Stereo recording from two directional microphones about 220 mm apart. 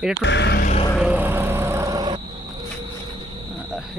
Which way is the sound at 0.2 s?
55° left (ahead or behind).